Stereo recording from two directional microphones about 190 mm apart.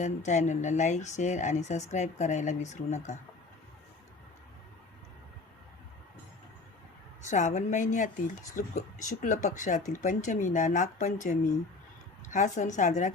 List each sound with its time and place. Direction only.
0.0 s speech: 40° left (ahead or behind)
7.3 s speech: 40° left (ahead or behind)